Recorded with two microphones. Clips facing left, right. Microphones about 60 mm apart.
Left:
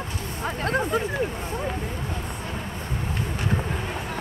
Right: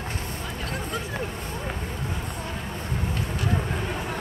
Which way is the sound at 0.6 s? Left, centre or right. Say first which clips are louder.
Left 9 dB; left.